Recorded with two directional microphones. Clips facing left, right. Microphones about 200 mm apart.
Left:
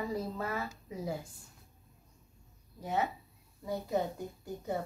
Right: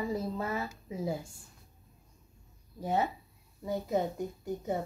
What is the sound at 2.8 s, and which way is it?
Speech, 35° right (ahead or behind).